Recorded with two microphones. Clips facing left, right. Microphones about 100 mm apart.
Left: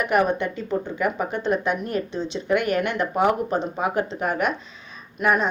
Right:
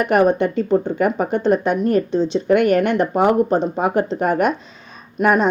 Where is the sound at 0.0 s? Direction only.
45° right (ahead or behind).